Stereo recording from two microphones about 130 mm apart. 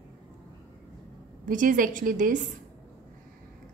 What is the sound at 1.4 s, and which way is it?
Speech, 90° right.